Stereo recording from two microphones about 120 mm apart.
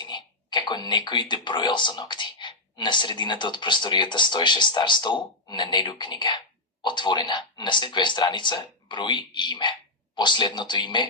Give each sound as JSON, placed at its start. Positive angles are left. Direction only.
{"t": 0.0, "sound": "speech", "side_deg": 40}